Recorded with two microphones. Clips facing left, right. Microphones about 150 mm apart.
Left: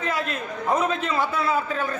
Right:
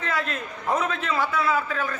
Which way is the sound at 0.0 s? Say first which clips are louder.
Left 1 dB; 15° left (ahead or behind).